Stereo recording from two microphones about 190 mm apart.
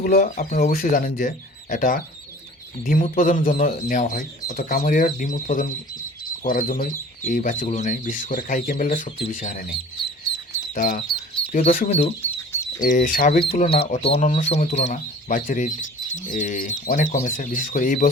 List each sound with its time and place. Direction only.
0.0 s speech: 50° left (ahead or behind)
10.8 s speech: 45° left (ahead or behind)
12.2 s duck: 15° left (ahead or behind)
12.8 s speech: 45° left (ahead or behind)
13.4 s speech: 30° left (ahead or behind); by 18.1 s 45° left (ahead or behind)